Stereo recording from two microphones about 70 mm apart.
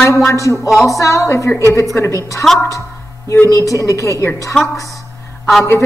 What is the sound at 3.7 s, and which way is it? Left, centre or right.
Speech, left.